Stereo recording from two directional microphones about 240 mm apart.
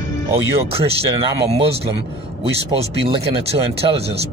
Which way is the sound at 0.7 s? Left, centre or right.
Right.